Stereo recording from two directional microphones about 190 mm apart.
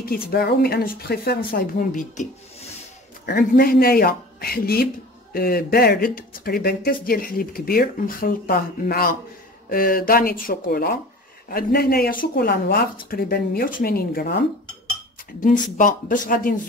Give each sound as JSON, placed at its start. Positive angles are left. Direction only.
{"t": 0.0, "sound": "speech", "side_deg": 55}
{"t": 15.8, "sound": "speech", "side_deg": 45}